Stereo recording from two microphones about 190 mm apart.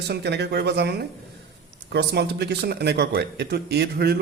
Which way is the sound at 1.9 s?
60° right (ahead or behind).